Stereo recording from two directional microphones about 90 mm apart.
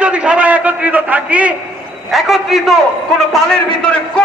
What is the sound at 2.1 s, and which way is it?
A man's voice, centre (ahead or behind).